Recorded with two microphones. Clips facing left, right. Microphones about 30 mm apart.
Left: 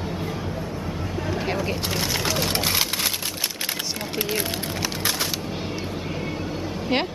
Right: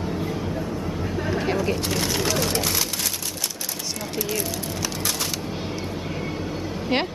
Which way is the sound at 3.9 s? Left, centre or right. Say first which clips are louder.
Right 1 dB; left.